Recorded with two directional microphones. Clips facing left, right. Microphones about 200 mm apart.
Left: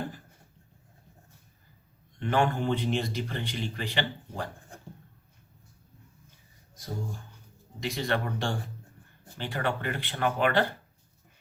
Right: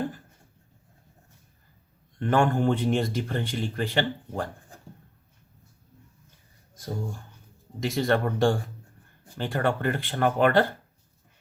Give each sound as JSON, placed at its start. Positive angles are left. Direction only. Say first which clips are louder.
{"t": 2.1, "sound": "a man's voice", "louder": "right 4 dB", "side_deg": -45}
{"t": 7.8, "sound": "a man's voice", "louder": "right 6 dB", "side_deg": -45}